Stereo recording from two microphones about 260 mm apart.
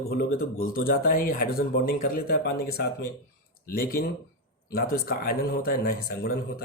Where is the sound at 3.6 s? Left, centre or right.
Left.